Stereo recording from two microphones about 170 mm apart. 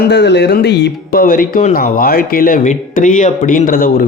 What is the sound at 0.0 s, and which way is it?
Speech, 80° left.